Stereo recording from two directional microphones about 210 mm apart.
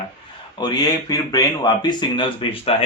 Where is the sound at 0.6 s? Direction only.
20° left (ahead or behind).